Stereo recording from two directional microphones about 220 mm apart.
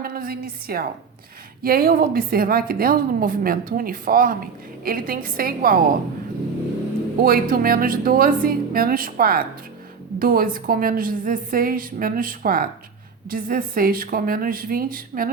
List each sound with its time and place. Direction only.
0.0 s a woman's voice: 40° right (ahead or behind)
7.2 s a woman's voice: 40° right (ahead or behind)